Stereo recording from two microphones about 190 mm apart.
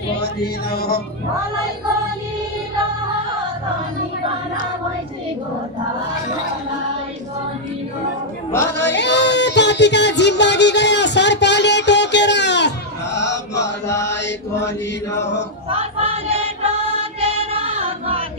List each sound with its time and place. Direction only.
0.2 s music: 55° left (ahead or behind)
8.5 s chatter: 10° left (ahead or behind)
8.7 s music: 65° left (ahead or behind)
13.8 s chant: 15° left (ahead or behind)
14.1 s mantra: 65° left (ahead or behind)
15.7 s music: 30° right (ahead or behind)
17.2 s child singing: 30° right (ahead or behind)